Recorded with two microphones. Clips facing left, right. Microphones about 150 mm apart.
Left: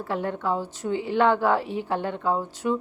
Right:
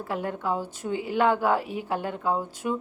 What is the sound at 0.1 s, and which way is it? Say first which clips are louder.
A woman's voice: left 2 dB; 10° right (ahead or behind).